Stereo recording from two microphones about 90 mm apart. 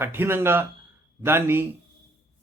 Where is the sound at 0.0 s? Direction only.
25° right (ahead or behind).